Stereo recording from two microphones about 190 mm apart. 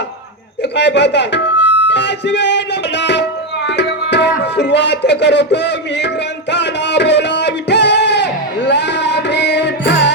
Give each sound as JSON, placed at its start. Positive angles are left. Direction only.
{"t": 0.8, "sound": "speech", "side_deg": 65}
{"t": 3.7, "sound": "music", "side_deg": 65}